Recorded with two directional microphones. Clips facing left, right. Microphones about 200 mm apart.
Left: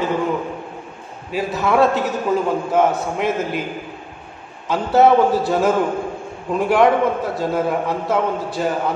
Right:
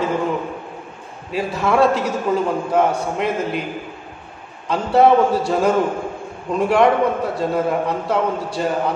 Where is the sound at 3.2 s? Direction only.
Centre (ahead or behind).